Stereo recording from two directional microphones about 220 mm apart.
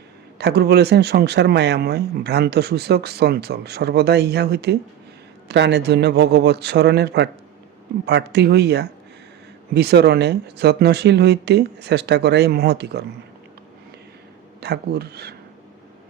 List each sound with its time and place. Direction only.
0.3 s speech: 50° right (ahead or behind)
14.6 s speech: 45° right (ahead or behind)